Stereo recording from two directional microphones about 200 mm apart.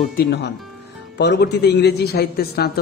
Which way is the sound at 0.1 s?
50° left (ahead or behind).